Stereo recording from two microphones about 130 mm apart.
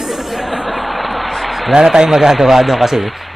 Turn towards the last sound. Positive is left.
turn(degrees=0)  # may be behind; listen again after turning